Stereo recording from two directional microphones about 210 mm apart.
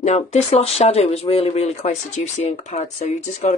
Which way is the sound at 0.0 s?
30° left (ahead or behind).